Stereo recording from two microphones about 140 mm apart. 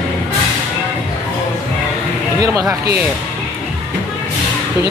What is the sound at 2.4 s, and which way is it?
Speech, 25° right (ahead or behind).